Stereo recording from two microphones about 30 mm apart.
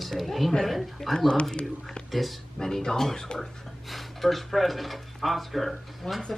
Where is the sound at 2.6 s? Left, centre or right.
Centre.